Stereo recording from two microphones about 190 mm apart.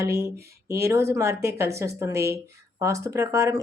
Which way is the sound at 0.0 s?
15° right (ahead or behind).